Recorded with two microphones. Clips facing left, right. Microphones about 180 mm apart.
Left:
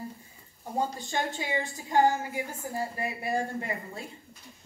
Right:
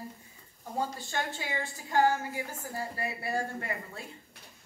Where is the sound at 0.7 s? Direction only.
15° left (ahead or behind).